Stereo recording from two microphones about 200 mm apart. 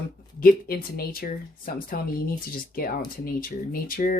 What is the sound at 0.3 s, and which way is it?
Speech, 45° left (ahead or behind).